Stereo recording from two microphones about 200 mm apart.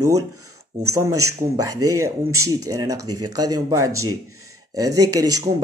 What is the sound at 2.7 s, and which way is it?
Speech, 20° right (ahead or behind).